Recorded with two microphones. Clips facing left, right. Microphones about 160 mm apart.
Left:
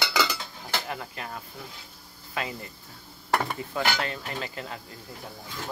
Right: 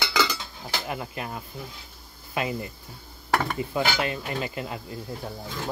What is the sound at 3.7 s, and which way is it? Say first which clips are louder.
Speech: right 2 dB; 15° right (ahead or behind).